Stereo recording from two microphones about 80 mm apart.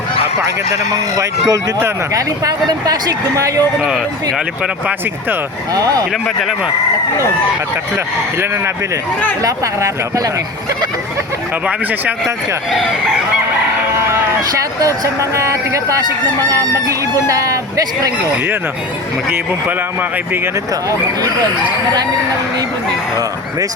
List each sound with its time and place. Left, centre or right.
1.1 s speech: right
5.7 s speech: right
7.9 s speech: right
9.4 s speech: right
11.6 s speech: right
14.8 s speech: right
19.6 s speech: right